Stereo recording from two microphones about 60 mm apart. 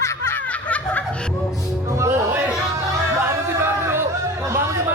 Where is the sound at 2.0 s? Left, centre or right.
Right.